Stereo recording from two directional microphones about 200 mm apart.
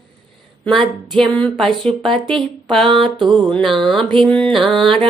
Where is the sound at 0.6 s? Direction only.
Centre (ahead or behind).